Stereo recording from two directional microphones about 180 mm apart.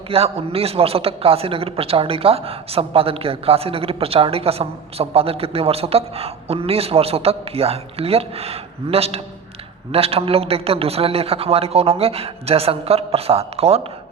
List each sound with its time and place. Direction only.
0.1 s a man's voice: 35° right (ahead or behind)